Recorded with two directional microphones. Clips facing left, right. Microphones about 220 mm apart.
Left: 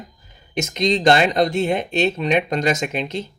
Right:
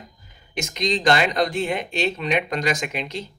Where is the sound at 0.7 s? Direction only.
25° left (ahead or behind).